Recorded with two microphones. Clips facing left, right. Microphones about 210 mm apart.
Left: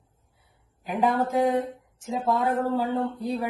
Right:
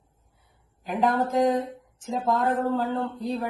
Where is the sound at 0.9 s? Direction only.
10° left (ahead or behind).